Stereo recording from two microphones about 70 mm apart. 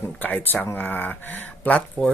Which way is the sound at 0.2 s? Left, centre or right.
Left.